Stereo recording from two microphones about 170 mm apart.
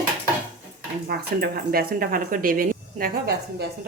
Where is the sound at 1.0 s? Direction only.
65° right (ahead or behind).